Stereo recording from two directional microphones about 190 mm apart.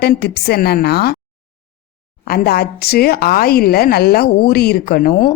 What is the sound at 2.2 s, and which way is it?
A woman's voice, 55° left (ahead or behind).